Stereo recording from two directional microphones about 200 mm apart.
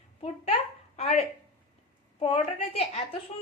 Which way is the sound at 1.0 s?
30° left (ahead or behind).